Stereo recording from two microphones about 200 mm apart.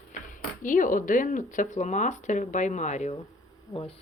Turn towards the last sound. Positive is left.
turn(degrees=30)  # may be behind; listen again after turning